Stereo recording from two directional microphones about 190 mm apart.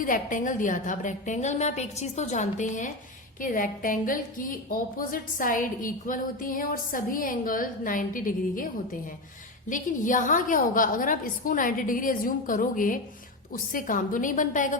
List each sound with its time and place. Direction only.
0.0 s a woman's voice: 45° left (ahead or behind)
9.6 s a woman's voice: 45° left (ahead or behind)